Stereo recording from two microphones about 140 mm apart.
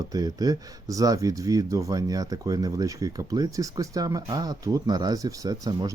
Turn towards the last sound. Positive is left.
turn(degrees=-25)  # may be behind; listen again after turning